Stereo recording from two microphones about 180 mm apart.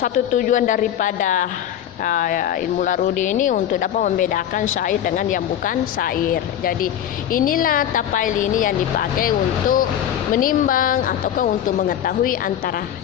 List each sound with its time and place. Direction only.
0.0 s speech: 50° left (ahead or behind)